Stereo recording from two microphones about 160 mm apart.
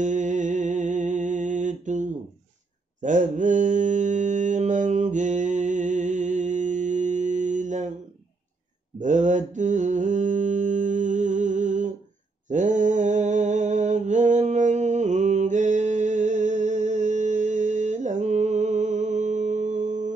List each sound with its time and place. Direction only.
0.0 s a sound: 50° right (ahead or behind)
3.0 s mantra: 50° right (ahead or behind)
9.0 s mantra: 50° right (ahead or behind)